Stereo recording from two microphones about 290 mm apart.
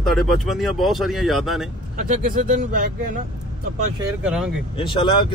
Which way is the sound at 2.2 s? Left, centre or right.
Right.